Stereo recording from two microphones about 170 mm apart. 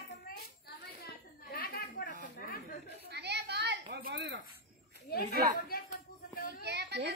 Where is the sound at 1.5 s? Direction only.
55° left (ahead or behind).